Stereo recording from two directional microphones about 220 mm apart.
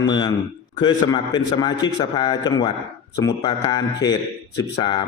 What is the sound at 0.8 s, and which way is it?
A man's voice, 20° left (ahead or behind).